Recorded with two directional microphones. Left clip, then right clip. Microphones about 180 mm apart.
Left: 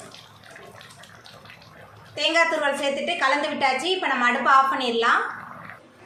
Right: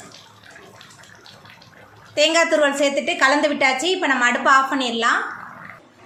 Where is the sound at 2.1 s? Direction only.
45° right (ahead or behind).